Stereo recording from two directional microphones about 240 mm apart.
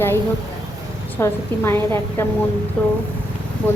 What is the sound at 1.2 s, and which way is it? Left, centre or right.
A woman's voice, centre.